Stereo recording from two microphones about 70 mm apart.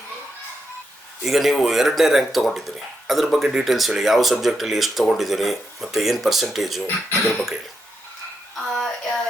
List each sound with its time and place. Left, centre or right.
1.2 s speech: centre
6.8 s speech: left
8.5 s a sound: centre